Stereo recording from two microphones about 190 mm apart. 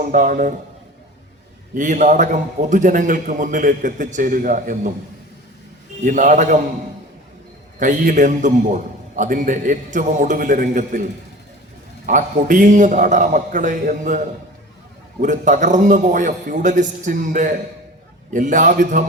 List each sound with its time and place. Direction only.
0.0 s a man's voice: 45° right (ahead or behind)
1.7 s a man's voice: 45° right (ahead or behind)
6.0 s a man's voice: 45° right (ahead or behind)
7.8 s a man's voice: 45° right (ahead or behind)
12.0 s a man's voice: 45° right (ahead or behind)
15.2 s a man's voice: 40° right (ahead or behind)